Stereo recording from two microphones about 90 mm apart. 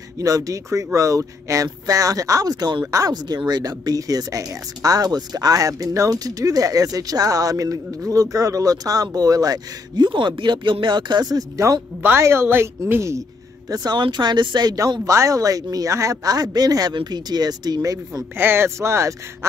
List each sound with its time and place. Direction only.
0.2 s speech: 40° right (ahead or behind)
12.0 s a woman's voice: 25° right (ahead or behind)
13.7 s speech: 50° right (ahead or behind)
15.0 s speech: 35° right (ahead or behind)
18.3 s a woman's voice: 25° right (ahead or behind)